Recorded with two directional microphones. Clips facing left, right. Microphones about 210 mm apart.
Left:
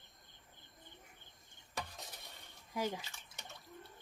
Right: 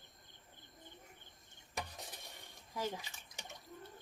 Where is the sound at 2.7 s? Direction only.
10° left (ahead or behind).